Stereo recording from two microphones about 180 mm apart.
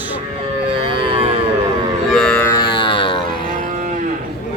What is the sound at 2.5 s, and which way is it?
Music, 25° left (ahead or behind).